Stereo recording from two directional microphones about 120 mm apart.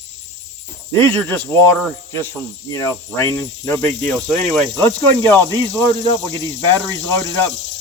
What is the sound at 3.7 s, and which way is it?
Speech, 5° left (ahead or behind).